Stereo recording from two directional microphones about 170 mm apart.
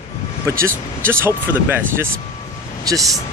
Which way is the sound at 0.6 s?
15° right (ahead or behind).